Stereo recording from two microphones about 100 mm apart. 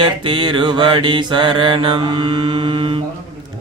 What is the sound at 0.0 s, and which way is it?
Mantra, 55° right (ahead or behind).